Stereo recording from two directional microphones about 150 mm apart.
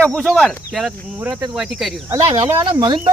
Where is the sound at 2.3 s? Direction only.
30° right (ahead or behind).